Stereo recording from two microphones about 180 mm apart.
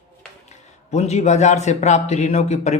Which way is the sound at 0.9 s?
40° left (ahead or behind).